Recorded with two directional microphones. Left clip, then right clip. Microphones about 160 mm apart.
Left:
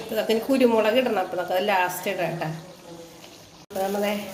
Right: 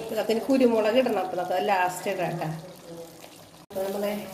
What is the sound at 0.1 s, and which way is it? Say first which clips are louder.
A woman's voice: left 2 dB; centre (ahead or behind).